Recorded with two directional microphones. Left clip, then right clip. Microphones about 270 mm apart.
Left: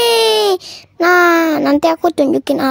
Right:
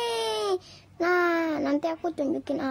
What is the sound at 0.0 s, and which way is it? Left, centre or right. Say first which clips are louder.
A child's voice: left 16 dB; left.